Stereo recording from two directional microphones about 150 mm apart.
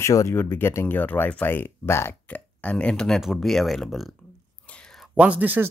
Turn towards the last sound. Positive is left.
turn(degrees=-10)  # may be behind; listen again after turning